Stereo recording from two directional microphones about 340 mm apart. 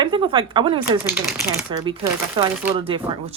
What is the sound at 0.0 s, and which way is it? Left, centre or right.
Speech, centre.